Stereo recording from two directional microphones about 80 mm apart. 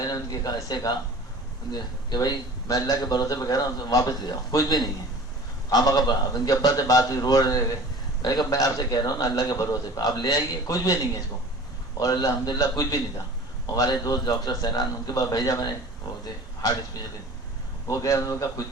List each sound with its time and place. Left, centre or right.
0.0 s a man's voice: left
3.0 s a man's voice: left
5.7 s a man's voice: left